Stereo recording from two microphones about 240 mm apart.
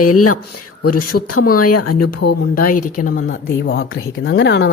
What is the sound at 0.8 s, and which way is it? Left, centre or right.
Speech, left.